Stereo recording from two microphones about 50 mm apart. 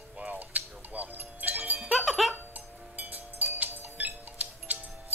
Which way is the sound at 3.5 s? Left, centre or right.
Right.